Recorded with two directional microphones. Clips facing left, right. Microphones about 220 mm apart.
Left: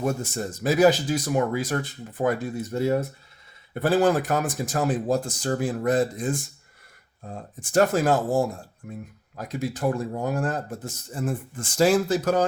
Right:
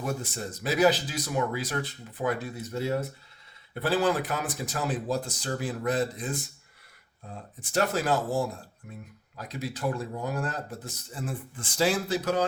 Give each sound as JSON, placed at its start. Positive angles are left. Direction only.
{"t": 0.0, "sound": "speech", "side_deg": 45}